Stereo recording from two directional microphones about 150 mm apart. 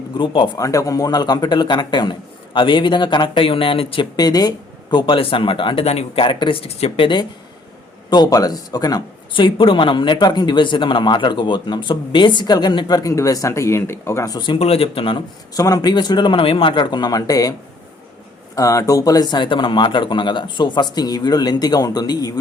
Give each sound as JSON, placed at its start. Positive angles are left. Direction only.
{"t": 0.2, "sound": "speech", "side_deg": 30}
{"t": 15.5, "sound": "speech", "side_deg": 25}
{"t": 18.5, "sound": "speech", "side_deg": 20}